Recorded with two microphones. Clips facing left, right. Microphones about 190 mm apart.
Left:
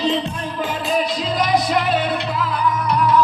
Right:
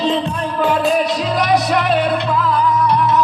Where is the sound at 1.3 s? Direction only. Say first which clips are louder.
Right 2 dB; 75° right (ahead or behind); by 2.6 s 50° right (ahead or behind).